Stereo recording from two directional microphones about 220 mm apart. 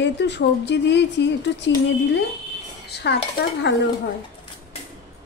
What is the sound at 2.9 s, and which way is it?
Speech, 50° left (ahead or behind).